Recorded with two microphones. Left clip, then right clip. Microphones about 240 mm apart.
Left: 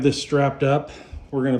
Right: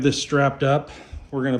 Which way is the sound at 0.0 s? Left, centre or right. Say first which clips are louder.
Even; centre.